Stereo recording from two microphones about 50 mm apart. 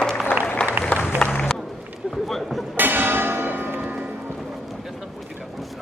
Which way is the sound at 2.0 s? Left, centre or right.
Centre.